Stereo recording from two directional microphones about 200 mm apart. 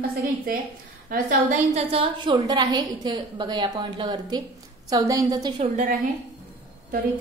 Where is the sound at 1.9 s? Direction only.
25° right (ahead or behind).